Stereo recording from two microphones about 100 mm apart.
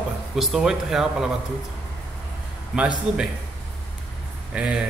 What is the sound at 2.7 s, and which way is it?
Speech, 10° right (ahead or behind).